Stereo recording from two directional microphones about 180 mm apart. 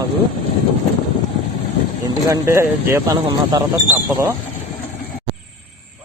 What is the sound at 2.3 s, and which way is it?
Speech, 15° right (ahead or behind).